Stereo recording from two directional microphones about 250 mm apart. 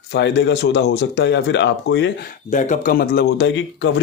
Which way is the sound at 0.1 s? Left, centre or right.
Left.